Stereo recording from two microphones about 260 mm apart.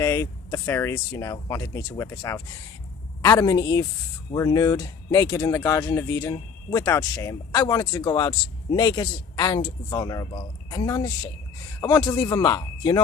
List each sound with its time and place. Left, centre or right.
0.0 s speech: centre